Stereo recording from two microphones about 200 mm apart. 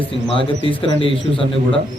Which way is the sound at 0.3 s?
25° left (ahead or behind).